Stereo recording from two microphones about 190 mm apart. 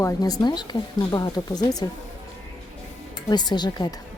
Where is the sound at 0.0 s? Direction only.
20° left (ahead or behind).